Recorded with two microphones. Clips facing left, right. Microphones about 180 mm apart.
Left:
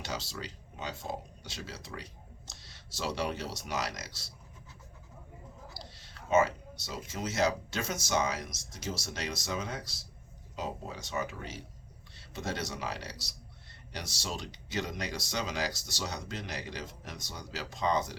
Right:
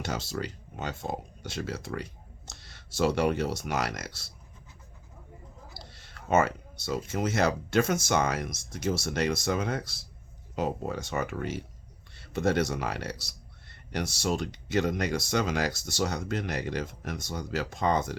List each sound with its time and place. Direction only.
0.0 s speech: 50° right (ahead or behind)
5.8 s speech: 55° right (ahead or behind)